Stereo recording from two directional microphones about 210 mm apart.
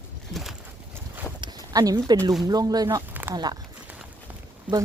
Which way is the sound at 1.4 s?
20° right (ahead or behind).